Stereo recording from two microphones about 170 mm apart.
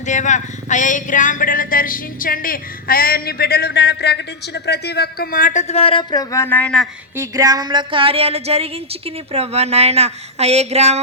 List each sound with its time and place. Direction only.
0.0 s speech: 45° left (ahead or behind); by 6.8 s 5° left (ahead or behind)
7.2 s a woman's voice: 20° right (ahead or behind); by 11.0 s 40° right (ahead or behind)